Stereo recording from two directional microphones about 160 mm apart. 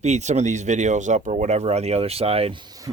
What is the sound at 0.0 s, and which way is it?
Speech, 45° right (ahead or behind).